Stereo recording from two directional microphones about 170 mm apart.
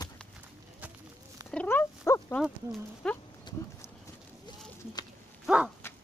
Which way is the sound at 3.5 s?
25° left (ahead or behind).